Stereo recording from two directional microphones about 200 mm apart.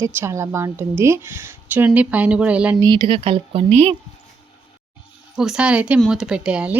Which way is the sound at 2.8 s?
25° right (ahead or behind).